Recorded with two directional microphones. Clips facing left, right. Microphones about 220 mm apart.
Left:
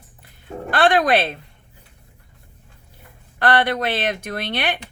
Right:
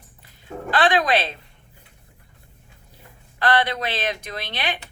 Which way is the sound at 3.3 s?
55° left (ahead or behind).